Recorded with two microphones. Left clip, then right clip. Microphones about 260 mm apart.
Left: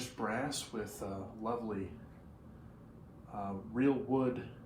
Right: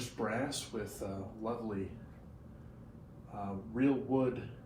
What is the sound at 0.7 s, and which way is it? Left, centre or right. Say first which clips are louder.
Speech: right 1 dB; left.